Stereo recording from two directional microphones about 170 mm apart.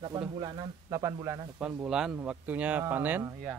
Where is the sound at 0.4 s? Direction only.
20° right (ahead or behind).